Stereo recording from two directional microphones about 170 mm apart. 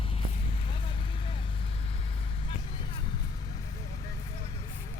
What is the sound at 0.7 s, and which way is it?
Vehicle, 30° left (ahead or behind).